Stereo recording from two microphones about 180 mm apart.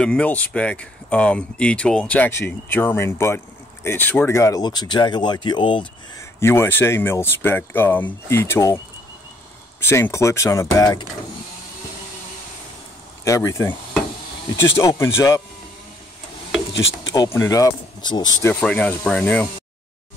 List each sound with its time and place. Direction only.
0.0 s speech: 5° left (ahead or behind); by 5.9 s 25° left (ahead or behind)
6.4 s speech: 15° left (ahead or behind)
13.2 s speech: 15° left (ahead or behind)
14.8 s speech: 15° left (ahead or behind)
16.7 s a sound: 90° left
17.1 s speech: 15° left (ahead or behind)
18.5 s speech: 5° left (ahead or behind)